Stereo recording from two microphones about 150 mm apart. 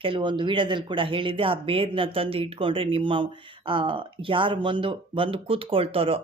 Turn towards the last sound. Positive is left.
turn(degrees=-40)  # may be behind; listen again after turning